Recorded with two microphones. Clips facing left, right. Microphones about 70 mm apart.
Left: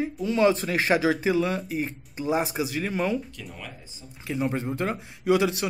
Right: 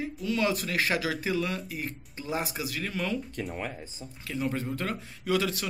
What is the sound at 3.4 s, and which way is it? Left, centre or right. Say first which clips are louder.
Speech: right 6 dB; right.